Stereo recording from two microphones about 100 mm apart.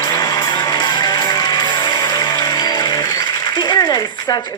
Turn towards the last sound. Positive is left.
turn(degrees=45)  # may be behind; listen again after turning